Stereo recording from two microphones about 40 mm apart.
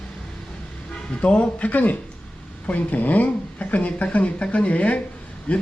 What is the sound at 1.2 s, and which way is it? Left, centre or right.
Speech, left.